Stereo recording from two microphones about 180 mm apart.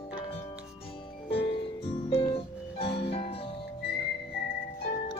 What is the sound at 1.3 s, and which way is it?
Music, 30° left (ahead or behind).